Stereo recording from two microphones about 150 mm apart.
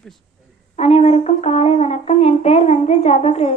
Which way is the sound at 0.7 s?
45° left (ahead or behind).